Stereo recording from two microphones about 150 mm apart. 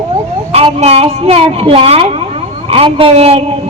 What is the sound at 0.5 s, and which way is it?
Speech, 45° right (ahead or behind).